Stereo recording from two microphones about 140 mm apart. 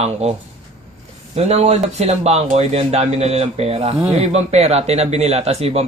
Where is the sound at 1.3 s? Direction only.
50° right (ahead or behind).